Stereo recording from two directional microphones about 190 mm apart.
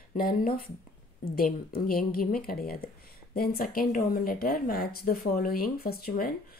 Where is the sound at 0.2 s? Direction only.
50° left (ahead or behind).